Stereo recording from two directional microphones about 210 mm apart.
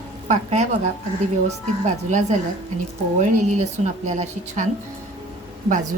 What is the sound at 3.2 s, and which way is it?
A woman's voice, 35° right (ahead or behind).